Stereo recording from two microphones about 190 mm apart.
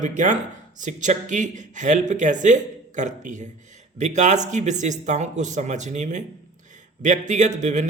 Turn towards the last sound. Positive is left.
turn(degrees=-40)  # may be behind; listen again after turning